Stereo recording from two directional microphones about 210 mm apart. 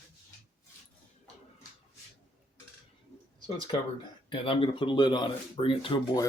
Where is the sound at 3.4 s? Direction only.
25° left (ahead or behind).